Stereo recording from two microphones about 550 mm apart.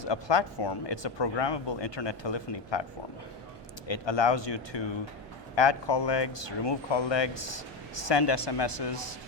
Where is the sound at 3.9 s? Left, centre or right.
Left.